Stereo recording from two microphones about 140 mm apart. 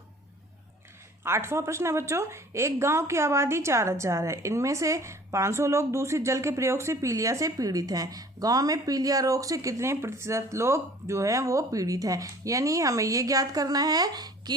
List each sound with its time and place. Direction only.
1.2 s a woman's voice: 20° right (ahead or behind)